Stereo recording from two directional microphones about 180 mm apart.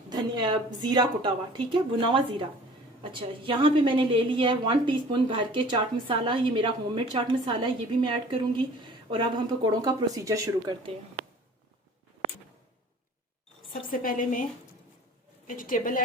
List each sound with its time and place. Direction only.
0.1 s a woman's voice: 25° right (ahead or behind)
13.9 s a woman's voice: 50° left (ahead or behind)
15.4 s a woman's voice: 50° left (ahead or behind)